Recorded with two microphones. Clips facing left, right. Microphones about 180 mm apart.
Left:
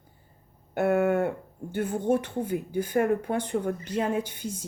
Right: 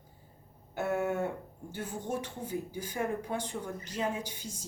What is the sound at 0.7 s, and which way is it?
Speech, 60° left (ahead or behind).